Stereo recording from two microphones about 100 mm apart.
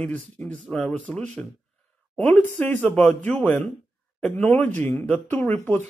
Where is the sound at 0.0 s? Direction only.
15° left (ahead or behind).